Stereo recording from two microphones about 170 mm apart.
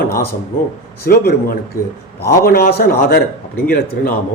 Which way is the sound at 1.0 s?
70° left (ahead or behind).